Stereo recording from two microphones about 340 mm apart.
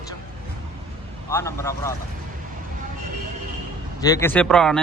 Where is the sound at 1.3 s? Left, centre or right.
Centre.